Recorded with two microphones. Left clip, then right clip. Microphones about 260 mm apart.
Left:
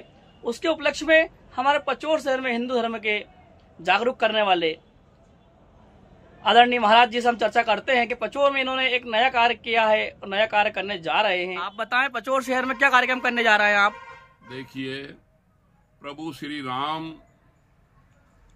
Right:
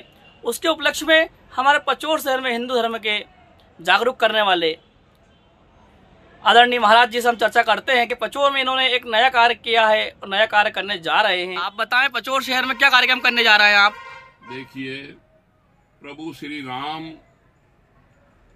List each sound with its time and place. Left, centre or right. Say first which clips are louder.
0.4 s speech: right 4 dB; centre
6.4 s speech: right 4 dB; centre
11.5 s speech: right 5 dB; centre
16.1 s speech: right 1 dB; centre